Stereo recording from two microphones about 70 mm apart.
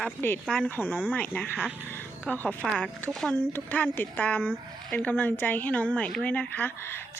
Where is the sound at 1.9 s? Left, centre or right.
Left.